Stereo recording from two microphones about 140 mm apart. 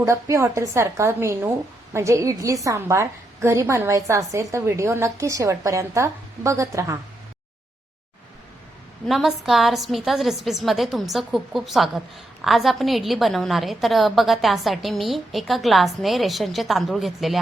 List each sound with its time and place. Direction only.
0.0 s a woman's voice: 20° right (ahead or behind)
9.0 s a woman's voice: centre (ahead or behind)